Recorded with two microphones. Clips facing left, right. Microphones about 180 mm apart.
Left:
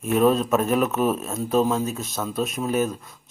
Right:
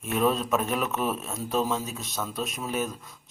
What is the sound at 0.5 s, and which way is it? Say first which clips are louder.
Speech: left 6 dB; 45° left (ahead or behind).